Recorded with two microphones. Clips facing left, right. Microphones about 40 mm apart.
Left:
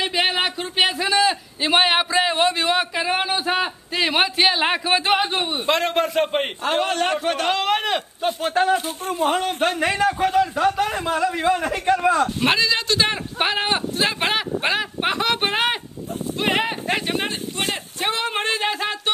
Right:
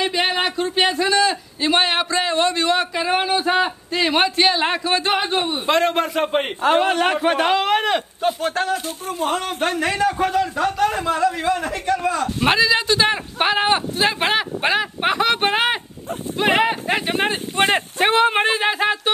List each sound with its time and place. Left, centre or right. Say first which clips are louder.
0.0 s a man's voice: right 1 dB; centre
12.4 s speech: right 3 dB; centre
17.3 s speech: right 7 dB; right
18.1 s speech: right 7 dB; right